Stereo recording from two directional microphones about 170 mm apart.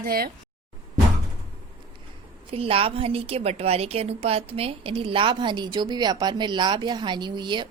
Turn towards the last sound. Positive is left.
turn(degrees=-25)  # may be behind; listen again after turning